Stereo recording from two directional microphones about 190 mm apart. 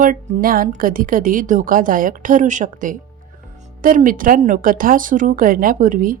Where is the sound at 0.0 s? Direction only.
45° right (ahead or behind).